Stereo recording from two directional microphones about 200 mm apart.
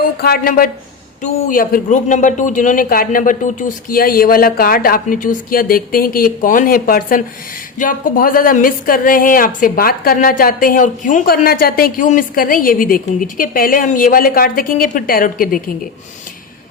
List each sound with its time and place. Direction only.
0.2 s a woman's voice: 45° left (ahead or behind)